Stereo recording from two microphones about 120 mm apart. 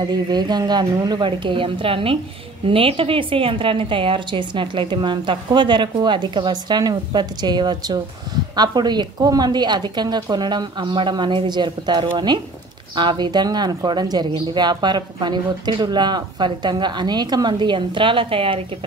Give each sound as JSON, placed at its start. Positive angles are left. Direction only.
{"t": 0.0, "sound": "speech", "side_deg": -35}